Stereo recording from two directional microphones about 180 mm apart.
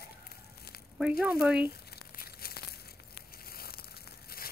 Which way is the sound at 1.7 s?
55° left (ahead or behind).